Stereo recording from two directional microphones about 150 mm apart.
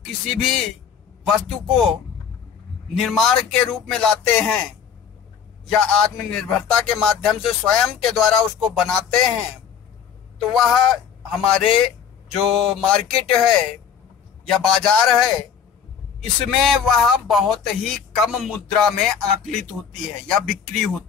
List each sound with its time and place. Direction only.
0.3 s speech: centre (ahead or behind)
3.0 s speech: centre (ahead or behind)
5.7 s speech: 5° left (ahead or behind)
10.4 s speech: centre (ahead or behind)
12.8 s speech: 5° left (ahead or behind)
14.5 s speech: 5° left (ahead or behind)
16.5 s speech: centre (ahead or behind)